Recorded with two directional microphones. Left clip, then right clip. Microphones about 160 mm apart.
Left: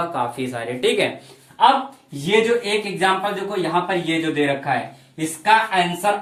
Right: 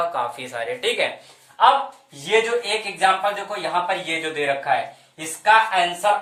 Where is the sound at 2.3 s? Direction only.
10° right (ahead or behind).